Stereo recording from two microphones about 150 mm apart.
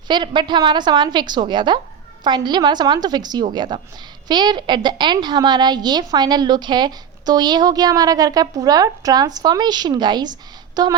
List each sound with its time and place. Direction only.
0.1 s a woman's voice: 30° right (ahead or behind)